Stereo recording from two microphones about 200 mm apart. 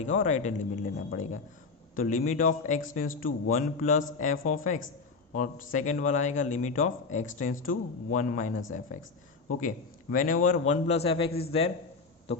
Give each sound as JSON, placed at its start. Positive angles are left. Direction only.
{"t": 0.0, "sound": "a man's voice", "side_deg": 35}